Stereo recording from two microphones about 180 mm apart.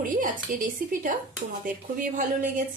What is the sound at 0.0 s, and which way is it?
A woman's voice, 50° right (ahead or behind).